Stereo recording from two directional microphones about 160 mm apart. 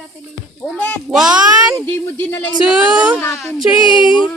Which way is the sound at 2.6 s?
5° right (ahead or behind).